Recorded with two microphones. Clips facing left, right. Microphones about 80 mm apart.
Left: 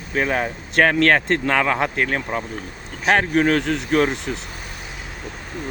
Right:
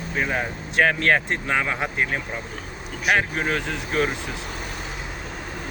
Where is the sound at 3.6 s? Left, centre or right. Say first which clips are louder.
Left 5 dB; left.